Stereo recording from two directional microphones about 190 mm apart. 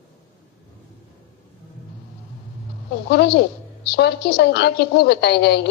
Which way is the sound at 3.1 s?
60° left (ahead or behind).